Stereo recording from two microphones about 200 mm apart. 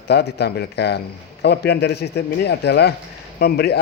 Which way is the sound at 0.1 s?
55° left (ahead or behind).